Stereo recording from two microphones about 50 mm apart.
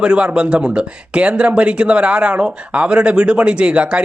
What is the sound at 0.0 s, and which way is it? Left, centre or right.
Speech, centre.